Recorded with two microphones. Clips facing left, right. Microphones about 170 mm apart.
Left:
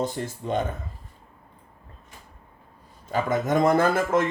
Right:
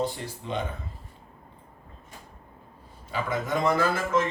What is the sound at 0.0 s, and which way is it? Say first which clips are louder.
Speech: left 2 dB; 45° left (ahead or behind).